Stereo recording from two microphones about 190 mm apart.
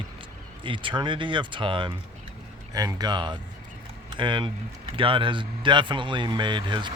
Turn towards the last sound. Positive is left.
turn(degrees=-25)  # may be behind; listen again after turning